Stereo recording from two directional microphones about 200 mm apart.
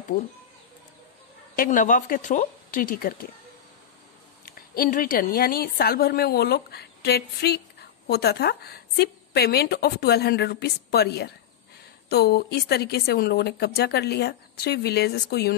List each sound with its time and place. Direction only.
1.6 s speech: 40° left (ahead or behind)
4.5 s a woman's voice: 45° left (ahead or behind)